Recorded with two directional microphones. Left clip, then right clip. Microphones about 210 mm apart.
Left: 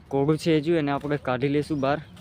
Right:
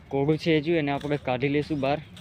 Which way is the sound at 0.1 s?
15° left (ahead or behind).